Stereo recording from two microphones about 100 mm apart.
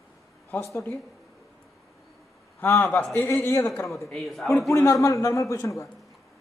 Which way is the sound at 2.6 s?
25° left (ahead or behind).